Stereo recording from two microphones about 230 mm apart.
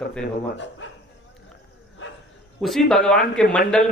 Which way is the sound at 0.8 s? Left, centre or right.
Left.